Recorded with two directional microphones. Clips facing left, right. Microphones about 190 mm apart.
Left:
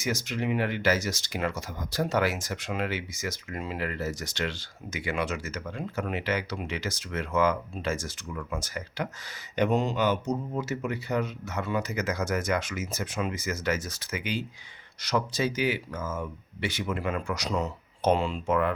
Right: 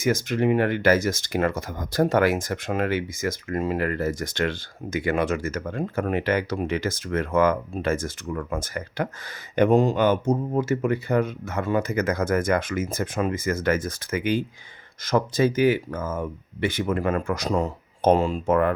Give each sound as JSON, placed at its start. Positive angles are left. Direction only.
{"t": 0.0, "sound": "speech", "side_deg": -55}